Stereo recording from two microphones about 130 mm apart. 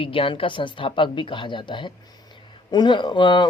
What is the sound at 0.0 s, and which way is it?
Speech, 40° left (ahead or behind).